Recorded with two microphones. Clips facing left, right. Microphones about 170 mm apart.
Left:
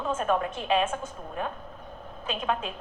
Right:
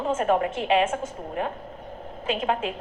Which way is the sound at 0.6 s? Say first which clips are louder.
Right 4 dB; 75° right (ahead or behind).